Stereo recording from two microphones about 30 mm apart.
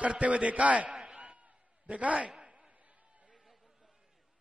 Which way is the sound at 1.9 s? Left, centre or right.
Right.